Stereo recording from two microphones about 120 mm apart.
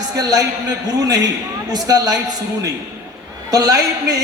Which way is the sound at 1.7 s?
30° right (ahead or behind).